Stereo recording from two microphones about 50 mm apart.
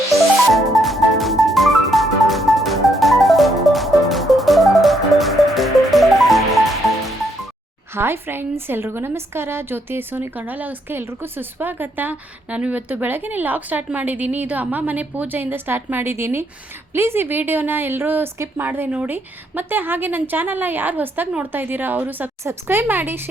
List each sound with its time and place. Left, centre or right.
0.5 s music: centre
7.9 s a woman's voice: right
10.9 s a woman's voice: right
16.1 s a woman's voice: right
22.4 s a woman's voice: right